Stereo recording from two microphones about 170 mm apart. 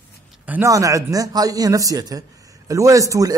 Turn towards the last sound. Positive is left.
turn(degrees=-20)  # may be behind; listen again after turning